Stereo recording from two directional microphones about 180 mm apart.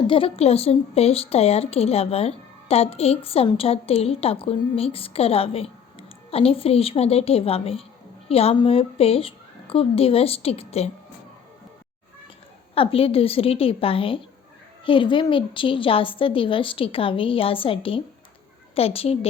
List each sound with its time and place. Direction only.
0.1 s a woman's voice: 30° left (ahead or behind)
12.7 s a woman's voice: 30° left (ahead or behind)